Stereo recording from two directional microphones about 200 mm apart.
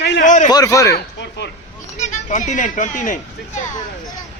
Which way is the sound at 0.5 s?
15° left (ahead or behind).